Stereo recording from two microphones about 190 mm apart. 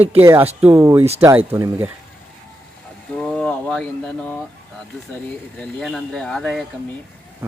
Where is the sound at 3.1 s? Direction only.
5° left (ahead or behind).